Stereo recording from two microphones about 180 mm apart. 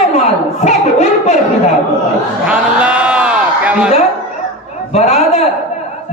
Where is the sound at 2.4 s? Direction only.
5° right (ahead or behind).